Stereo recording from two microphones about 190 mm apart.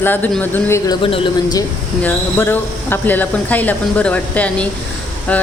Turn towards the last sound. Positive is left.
turn(degrees=5)  # may be behind; listen again after turning